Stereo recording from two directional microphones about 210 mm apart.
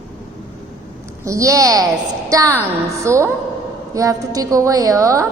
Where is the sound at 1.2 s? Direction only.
15° right (ahead or behind).